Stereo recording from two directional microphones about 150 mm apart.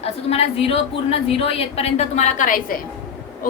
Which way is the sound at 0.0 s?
40° left (ahead or behind).